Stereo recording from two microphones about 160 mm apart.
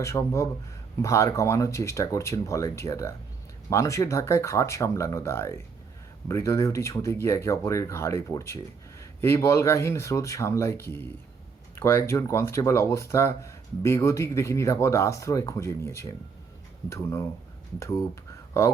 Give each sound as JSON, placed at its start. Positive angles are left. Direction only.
{"t": 0.0, "sound": "speech", "side_deg": 20}